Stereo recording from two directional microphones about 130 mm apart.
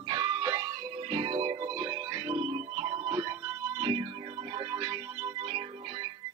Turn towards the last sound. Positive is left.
turn(degrees=-45)  # may be behind; listen again after turning